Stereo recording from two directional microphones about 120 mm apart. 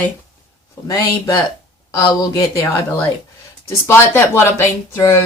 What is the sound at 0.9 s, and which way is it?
Speech, 30° left (ahead or behind).